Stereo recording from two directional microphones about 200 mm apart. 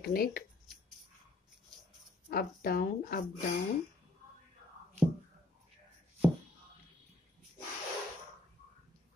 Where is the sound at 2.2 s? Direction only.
50° left (ahead or behind).